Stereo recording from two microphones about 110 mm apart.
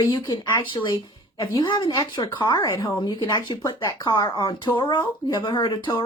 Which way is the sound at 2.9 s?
45° left (ahead or behind).